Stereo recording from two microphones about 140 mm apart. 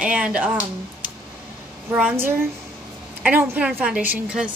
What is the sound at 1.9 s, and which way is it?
A woman's voice, 10° right (ahead or behind).